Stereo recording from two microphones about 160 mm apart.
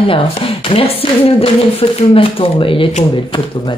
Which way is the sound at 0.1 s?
35° left (ahead or behind).